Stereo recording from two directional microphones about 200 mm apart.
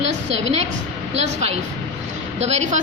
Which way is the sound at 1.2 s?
35° right (ahead or behind).